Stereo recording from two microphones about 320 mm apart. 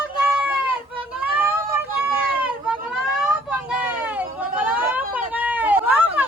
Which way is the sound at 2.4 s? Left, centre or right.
Centre.